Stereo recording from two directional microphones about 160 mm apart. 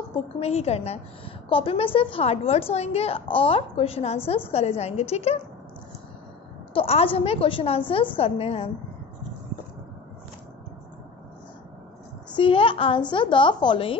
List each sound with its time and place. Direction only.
0.4 s a woman's voice: 40° left (ahead or behind)
6.7 s a woman's voice: 35° left (ahead or behind)
12.4 s a woman's voice: 35° left (ahead or behind)